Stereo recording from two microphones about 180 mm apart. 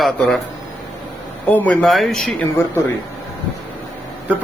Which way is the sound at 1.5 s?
10° left (ahead or behind).